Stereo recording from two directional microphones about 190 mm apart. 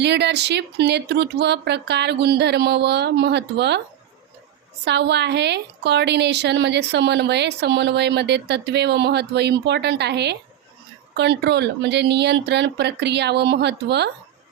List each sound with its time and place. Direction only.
0.0 s a woman's voice: 65° right (ahead or behind)
4.9 s a woman's voice: 65° right (ahead or behind)